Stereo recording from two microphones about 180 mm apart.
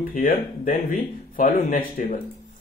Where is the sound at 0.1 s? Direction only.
50° left (ahead or behind).